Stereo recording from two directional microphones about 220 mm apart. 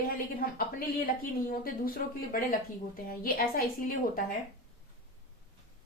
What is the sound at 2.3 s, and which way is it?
A woman's voice, 40° left (ahead or behind).